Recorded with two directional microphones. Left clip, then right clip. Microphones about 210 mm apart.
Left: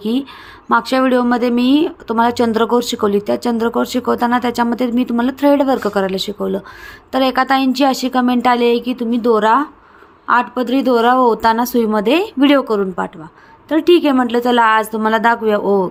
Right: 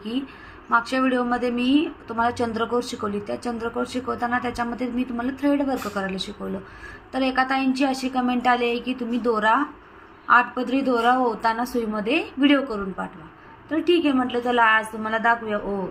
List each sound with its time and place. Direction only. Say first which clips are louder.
0.7 s a woman's voice: left 8 dB; 55° left (ahead or behind)